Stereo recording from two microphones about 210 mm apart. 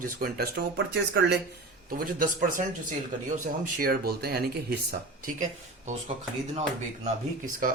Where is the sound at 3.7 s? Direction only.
45° right (ahead or behind).